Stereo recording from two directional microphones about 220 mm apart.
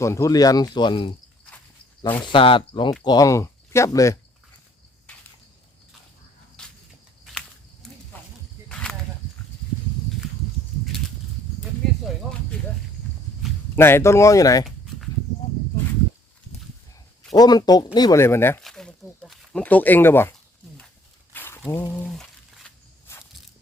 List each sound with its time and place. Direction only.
0.0 s speech: 15° left (ahead or behind)
1.5 s cricket: 5° left (ahead or behind)
2.2 s speech: 25° left (ahead or behind)
7.3 s a sound: centre (ahead or behind)
13.7 s speech: 10° left (ahead or behind)
17.3 s speech: 15° left (ahead or behind)
21.3 s a sound: 10° left (ahead or behind)